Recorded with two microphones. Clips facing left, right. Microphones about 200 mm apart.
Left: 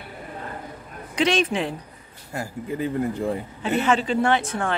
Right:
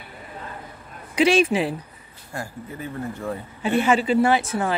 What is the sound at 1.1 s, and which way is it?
Speech, 10° right (ahead or behind).